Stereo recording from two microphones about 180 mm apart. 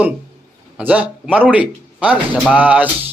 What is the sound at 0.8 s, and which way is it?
Speech, 10° right (ahead or behind).